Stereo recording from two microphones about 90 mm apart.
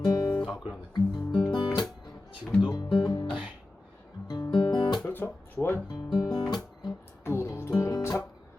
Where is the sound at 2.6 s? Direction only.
55° left (ahead or behind).